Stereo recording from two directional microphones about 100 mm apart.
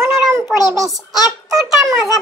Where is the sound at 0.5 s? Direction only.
40° left (ahead or behind).